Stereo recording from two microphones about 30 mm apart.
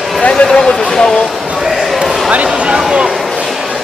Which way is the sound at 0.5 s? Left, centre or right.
Left.